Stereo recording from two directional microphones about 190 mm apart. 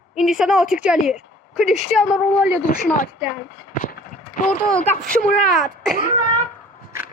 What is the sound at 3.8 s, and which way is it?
Clip-clop, 45° left (ahead or behind).